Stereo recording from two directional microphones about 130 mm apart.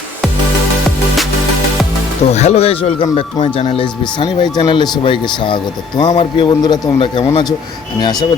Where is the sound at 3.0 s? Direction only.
40° left (ahead or behind).